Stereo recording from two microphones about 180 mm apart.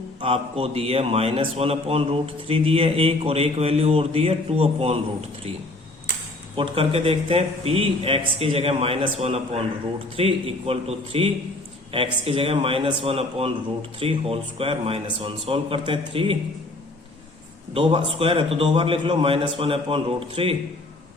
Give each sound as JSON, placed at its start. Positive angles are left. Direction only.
{"t": 0.2, "sound": "a man's voice", "side_deg": -30}
{"t": 6.6, "sound": "a man's voice", "side_deg": -30}
{"t": 17.7, "sound": "a man's voice", "side_deg": -30}